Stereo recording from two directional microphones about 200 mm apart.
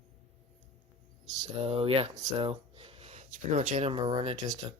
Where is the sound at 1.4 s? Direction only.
25° right (ahead or behind).